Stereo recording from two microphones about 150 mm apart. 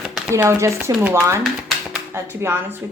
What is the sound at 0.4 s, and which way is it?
A woman's voice, 20° right (ahead or behind).